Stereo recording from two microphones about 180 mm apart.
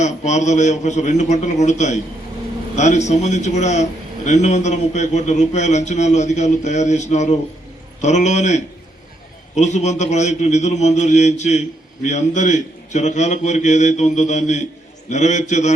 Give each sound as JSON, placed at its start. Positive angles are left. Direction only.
{"t": 0.0, "sound": "a man's voice", "side_deg": 40}